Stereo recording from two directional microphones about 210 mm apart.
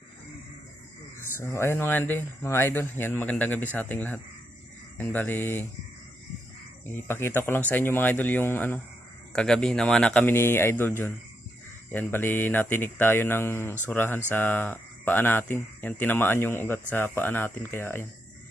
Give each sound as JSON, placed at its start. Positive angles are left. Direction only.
{"t": 1.4, "sound": "speech", "side_deg": 10}
{"t": 6.8, "sound": "speech", "side_deg": 10}